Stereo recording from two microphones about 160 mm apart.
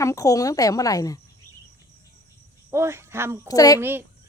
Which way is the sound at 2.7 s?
15° right (ahead or behind).